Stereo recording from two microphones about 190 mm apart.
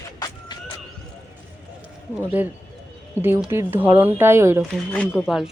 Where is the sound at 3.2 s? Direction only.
10° right (ahead or behind).